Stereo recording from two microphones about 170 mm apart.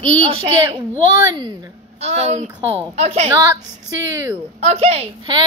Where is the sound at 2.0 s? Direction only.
40° right (ahead or behind).